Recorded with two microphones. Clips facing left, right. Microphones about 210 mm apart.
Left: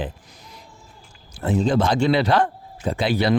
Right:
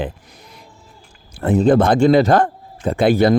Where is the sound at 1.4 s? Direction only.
55° right (ahead or behind).